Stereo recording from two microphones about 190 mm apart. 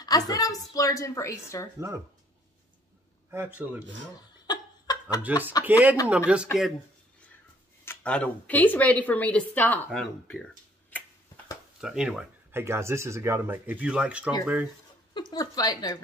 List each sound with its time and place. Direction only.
0.0 s speech: 20° left (ahead or behind)
3.3 s speech: 10° right (ahead or behind)
5.3 s speech: 10° right (ahead or behind)
7.8 s speech: 10° left (ahead or behind)
11.8 s speech: 5° right (ahead or behind)
15.1 s a woman's voice: 20° left (ahead or behind)